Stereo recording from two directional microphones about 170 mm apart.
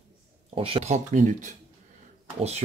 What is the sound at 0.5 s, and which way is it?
Speech, 35° right (ahead or behind).